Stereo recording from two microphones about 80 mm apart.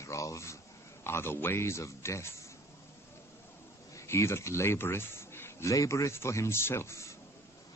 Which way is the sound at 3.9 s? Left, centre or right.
Left.